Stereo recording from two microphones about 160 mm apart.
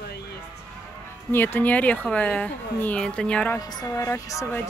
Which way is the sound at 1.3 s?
15° left (ahead or behind).